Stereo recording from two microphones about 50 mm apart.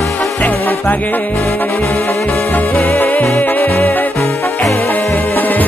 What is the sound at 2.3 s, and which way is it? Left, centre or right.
Music, left.